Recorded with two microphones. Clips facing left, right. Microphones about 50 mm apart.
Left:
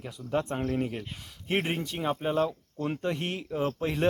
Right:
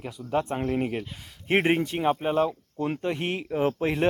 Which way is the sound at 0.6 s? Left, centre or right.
Right.